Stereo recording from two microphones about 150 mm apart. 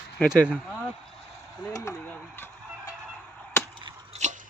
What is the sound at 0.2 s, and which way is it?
Speech, 5° left (ahead or behind).